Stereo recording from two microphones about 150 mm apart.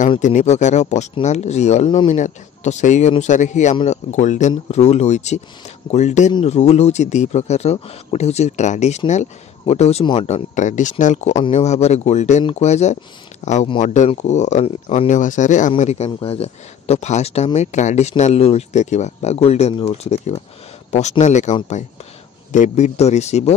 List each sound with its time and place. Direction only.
0.2 s speech: 55° left (ahead or behind)